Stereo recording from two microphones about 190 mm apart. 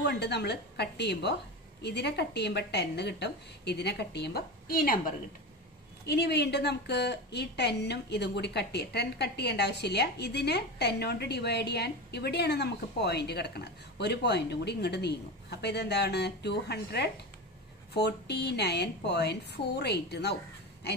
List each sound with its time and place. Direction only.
0.0 s a woman's voice: 60° left (ahead or behind)
6.0 s a woman's voice: 60° left (ahead or behind)